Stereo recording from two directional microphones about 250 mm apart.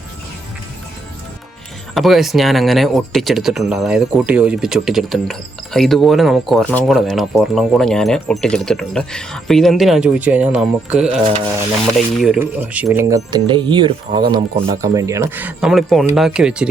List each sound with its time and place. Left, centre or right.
2.0 s speech: centre
12.2 s speech: centre